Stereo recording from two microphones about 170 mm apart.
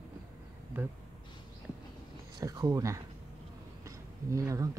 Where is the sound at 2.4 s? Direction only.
20° right (ahead or behind).